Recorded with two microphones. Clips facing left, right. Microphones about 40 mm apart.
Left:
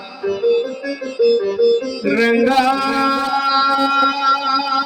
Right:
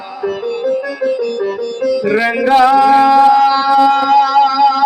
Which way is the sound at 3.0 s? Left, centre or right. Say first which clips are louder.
Right 8 dB; centre.